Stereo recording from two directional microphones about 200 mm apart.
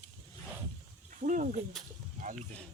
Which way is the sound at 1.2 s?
40° right (ahead or behind).